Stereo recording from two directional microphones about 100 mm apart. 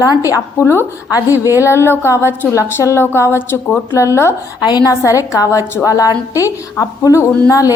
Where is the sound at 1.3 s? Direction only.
20° right (ahead or behind).